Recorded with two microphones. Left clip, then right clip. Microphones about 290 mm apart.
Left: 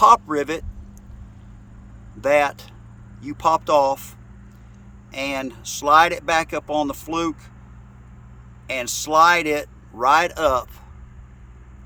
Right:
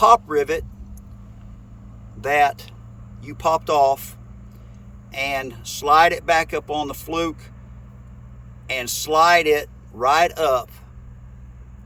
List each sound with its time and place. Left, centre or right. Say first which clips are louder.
0.0 s speech: even; left
2.2 s speech: even; centre
5.1 s speech: right 2 dB; centre
8.6 s speech: right 1 dB; centre